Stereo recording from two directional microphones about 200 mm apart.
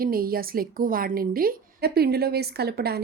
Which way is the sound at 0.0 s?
45° right (ahead or behind).